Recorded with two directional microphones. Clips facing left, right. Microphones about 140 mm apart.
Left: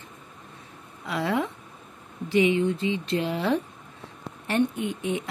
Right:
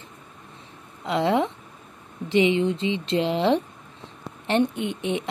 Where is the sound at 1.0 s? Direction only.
25° right (ahead or behind).